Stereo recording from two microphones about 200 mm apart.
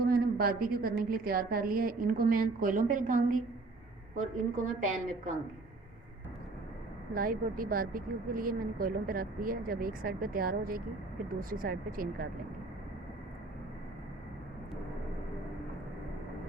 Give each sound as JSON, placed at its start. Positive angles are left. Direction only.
{"t": 0.0, "sound": "a woman's voice", "side_deg": -45}
{"t": 7.1, "sound": "speech", "side_deg": -45}